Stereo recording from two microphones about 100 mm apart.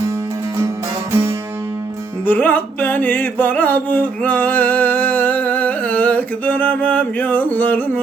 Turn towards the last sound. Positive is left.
turn(degrees=15)  # may be behind; listen again after turning